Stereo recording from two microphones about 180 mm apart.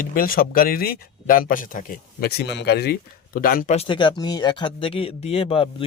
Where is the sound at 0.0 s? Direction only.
50° left (ahead or behind).